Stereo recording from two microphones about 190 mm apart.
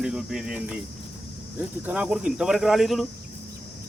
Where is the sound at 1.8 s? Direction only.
5° right (ahead or behind).